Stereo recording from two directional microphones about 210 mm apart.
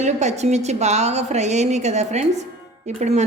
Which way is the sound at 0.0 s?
35° right (ahead or behind).